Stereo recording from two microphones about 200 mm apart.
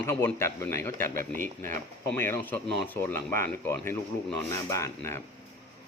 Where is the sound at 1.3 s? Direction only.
40° right (ahead or behind).